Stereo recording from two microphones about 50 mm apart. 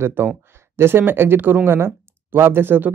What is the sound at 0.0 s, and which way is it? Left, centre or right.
Speech, right.